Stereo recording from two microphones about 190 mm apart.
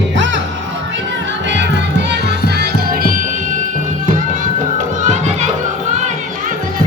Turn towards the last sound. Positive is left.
turn(degrees=-40)  # may be behind; listen again after turning